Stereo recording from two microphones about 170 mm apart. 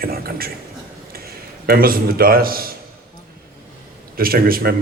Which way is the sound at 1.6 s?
60° right (ahead or behind).